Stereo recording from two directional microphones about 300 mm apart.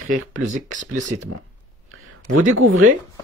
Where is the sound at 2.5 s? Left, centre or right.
Right.